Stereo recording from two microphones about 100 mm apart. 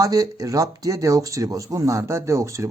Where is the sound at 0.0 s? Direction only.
35° right (ahead or behind).